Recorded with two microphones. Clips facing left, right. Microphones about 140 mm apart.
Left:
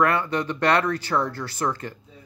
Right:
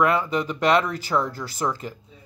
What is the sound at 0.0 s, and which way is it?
Speech, 5° right (ahead or behind).